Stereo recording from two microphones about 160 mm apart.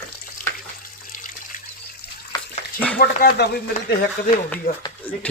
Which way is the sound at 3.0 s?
70° left (ahead or behind).